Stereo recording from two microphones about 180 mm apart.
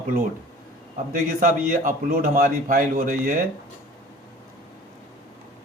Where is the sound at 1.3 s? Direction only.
50° right (ahead or behind).